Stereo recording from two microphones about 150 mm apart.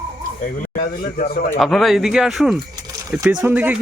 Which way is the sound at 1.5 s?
Centre (ahead or behind).